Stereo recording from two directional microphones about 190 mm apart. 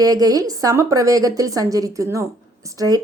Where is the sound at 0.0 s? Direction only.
20° right (ahead or behind).